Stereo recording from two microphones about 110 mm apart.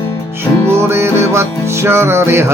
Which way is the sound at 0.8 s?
25° right (ahead or behind).